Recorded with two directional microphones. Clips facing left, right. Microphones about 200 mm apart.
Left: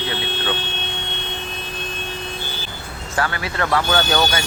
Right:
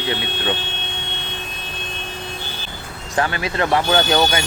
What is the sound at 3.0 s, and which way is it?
Speech, 20° right (ahead or behind).